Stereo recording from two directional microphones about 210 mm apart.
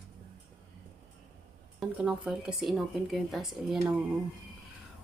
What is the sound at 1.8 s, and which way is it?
Speech, centre (ahead or behind).